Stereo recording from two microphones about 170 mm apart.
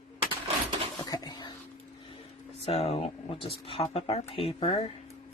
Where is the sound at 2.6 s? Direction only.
35° left (ahead or behind).